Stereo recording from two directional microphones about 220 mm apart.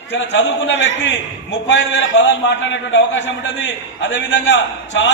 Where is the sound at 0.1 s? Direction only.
55° left (ahead or behind).